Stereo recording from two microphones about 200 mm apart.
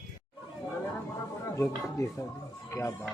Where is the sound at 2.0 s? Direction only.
15° left (ahead or behind).